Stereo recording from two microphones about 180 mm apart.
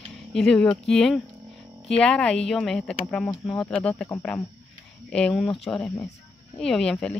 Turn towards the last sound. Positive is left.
turn(degrees=5)  # may be behind; listen again after turning